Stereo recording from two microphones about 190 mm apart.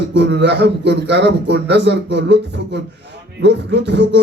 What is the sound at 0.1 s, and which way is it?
A man's voice, 70° right (ahead or behind).